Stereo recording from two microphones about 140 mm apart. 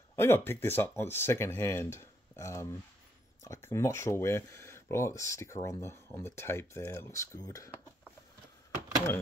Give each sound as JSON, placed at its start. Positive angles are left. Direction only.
{"t": 0.1, "sound": "speech", "side_deg": 15}